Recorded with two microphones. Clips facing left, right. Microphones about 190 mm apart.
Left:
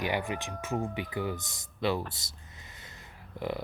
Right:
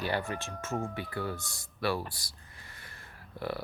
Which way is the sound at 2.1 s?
20° left (ahead or behind).